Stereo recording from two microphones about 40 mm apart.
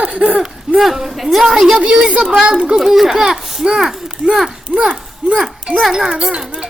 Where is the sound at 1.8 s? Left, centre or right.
Right.